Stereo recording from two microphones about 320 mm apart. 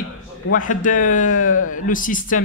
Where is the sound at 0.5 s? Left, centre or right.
Left.